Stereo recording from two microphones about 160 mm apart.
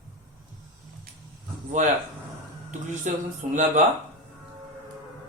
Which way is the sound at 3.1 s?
50° right (ahead or behind).